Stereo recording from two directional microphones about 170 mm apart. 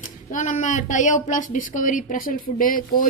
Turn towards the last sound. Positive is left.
turn(degrees=55)  # may be behind; listen again after turning